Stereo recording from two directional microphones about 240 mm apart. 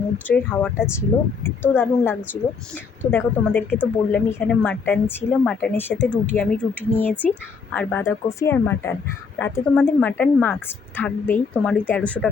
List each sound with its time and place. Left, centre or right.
0.3 s speech: centre